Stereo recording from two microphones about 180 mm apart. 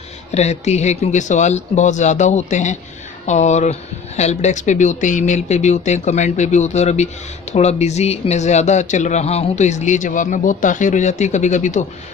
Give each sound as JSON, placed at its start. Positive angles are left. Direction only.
{"t": 0.3, "sound": "speech", "side_deg": 40}